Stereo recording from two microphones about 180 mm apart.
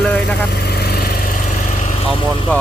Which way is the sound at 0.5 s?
65° left (ahead or behind).